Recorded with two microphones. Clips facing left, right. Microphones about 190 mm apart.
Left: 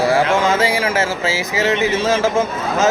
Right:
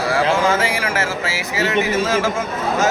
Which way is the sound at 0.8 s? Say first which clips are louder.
Left 3 dB; 25° left (ahead or behind).